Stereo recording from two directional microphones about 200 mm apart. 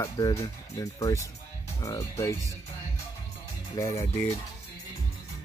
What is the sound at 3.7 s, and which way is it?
Speech, 15° left (ahead or behind).